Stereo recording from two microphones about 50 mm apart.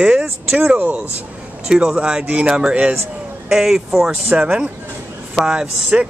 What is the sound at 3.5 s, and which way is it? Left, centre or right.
Speech, centre.